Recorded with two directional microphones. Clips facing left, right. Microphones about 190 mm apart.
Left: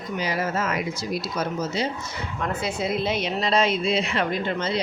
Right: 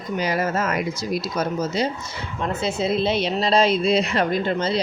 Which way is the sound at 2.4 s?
25° right (ahead or behind).